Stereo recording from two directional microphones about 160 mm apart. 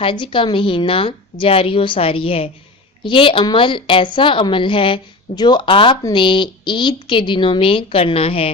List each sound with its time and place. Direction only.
0.0 s a woman's voice: 30° left (ahead or behind)